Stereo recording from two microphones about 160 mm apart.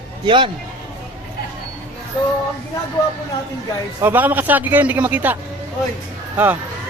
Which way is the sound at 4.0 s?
10° right (ahead or behind).